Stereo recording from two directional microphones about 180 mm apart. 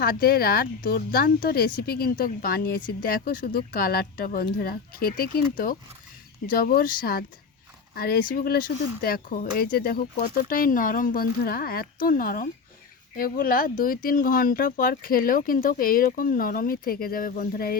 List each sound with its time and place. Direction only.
0.0 s speech: 55° left (ahead or behind)